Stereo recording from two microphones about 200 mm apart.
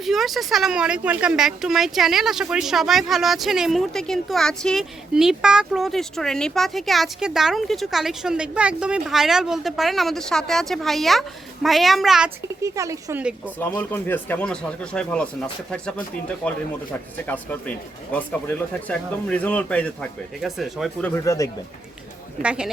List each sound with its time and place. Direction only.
0.0 s speech: centre (ahead or behind)
12.6 s speech: 15° right (ahead or behind)
13.6 s speech: 10° left (ahead or behind)
17.2 s speech: 10° left (ahead or behind)
21.2 s speech: 15° left (ahead or behind)
22.4 s speech: 5° right (ahead or behind)